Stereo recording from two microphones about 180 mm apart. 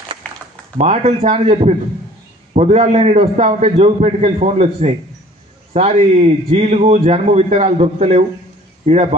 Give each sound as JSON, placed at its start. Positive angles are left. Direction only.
{"t": 0.7, "sound": "a man's voice", "side_deg": -35}